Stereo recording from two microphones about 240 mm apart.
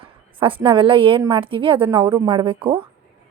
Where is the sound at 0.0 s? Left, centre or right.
Right.